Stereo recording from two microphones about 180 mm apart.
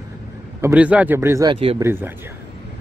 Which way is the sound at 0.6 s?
10° right (ahead or behind).